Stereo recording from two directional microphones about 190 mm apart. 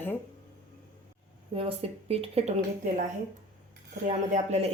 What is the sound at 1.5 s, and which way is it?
Speech, 30° right (ahead or behind).